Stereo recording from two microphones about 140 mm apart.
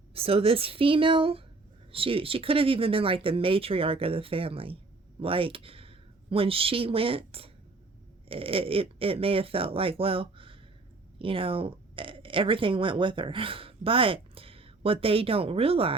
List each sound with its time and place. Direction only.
0.1 s speech: 45° right (ahead or behind)